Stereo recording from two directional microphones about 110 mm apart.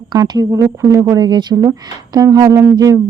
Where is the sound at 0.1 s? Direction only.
35° right (ahead or behind).